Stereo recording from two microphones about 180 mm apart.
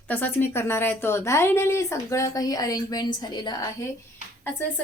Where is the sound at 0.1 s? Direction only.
10° left (ahead or behind).